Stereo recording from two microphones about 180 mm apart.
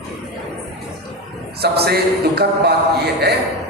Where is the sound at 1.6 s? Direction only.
65° right (ahead or behind).